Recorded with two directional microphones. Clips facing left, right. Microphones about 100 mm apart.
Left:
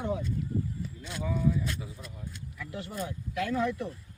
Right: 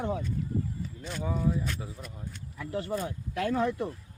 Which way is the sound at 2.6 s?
40° right (ahead or behind).